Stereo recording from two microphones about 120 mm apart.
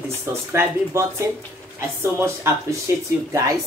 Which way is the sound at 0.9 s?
20° right (ahead or behind).